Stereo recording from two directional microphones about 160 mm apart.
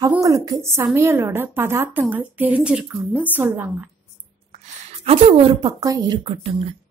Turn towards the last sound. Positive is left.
turn(degrees=-35)  # may be behind; listen again after turning